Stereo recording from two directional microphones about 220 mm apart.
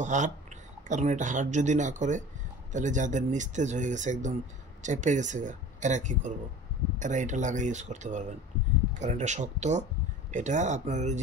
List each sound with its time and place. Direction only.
0.0 s speech: 35° right (ahead or behind)